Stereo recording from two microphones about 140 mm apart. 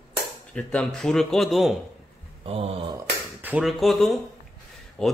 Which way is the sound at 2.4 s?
45° right (ahead or behind).